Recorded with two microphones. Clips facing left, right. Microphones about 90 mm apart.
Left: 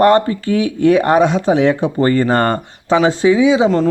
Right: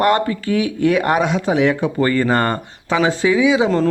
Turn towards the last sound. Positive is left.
turn(degrees=30)  # may be behind; listen again after turning